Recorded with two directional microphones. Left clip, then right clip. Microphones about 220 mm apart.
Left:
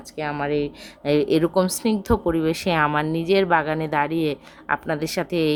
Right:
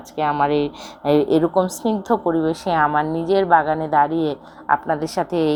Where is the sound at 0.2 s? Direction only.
10° left (ahead or behind).